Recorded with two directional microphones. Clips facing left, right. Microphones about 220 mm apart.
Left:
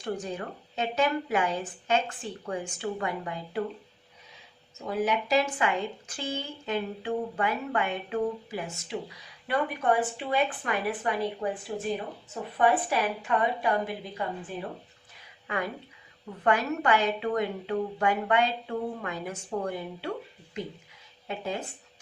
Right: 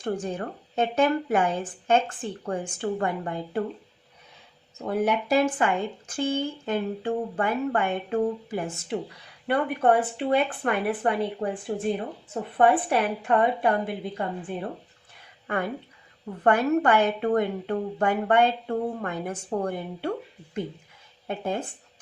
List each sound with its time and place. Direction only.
0.0 s a woman's voice: 50° right (ahead or behind)
4.9 s a woman's voice: 55° right (ahead or behind)
15.5 s a woman's voice: 55° right (ahead or behind)
19.3 s a woman's voice: 40° right (ahead or behind)
21.2 s a woman's voice: 50° right (ahead or behind)